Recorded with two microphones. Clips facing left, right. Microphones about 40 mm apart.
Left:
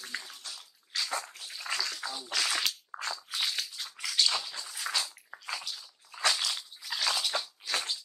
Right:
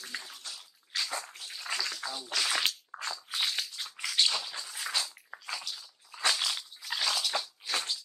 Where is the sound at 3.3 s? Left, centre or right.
Right.